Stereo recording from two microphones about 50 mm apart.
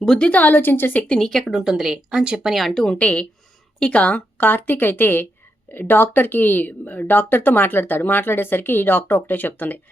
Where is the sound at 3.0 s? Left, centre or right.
Left.